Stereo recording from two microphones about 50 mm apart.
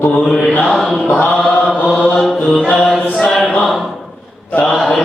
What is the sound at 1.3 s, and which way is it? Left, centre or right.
Chant, centre.